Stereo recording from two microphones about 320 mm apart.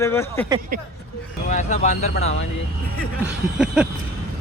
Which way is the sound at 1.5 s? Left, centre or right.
Left.